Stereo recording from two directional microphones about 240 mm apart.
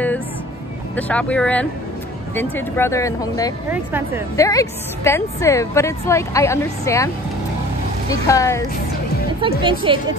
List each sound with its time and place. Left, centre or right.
0.9 s a woman's voice: centre
3.7 s speech: centre
4.4 s a woman's voice: centre
8.1 s a woman's voice: centre
9.6 s a woman's voice: right